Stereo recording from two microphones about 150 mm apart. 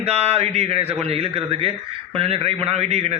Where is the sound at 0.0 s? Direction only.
40° right (ahead or behind).